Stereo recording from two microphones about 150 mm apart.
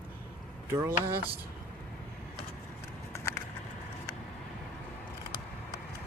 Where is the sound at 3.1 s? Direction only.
15° left (ahead or behind).